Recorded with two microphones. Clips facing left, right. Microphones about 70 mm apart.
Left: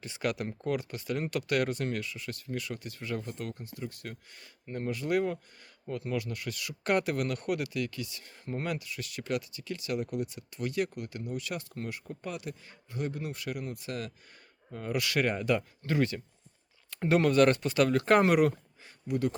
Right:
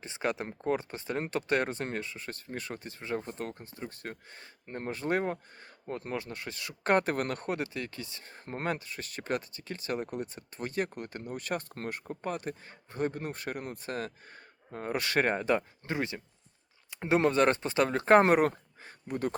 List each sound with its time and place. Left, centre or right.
0.0 s speech: right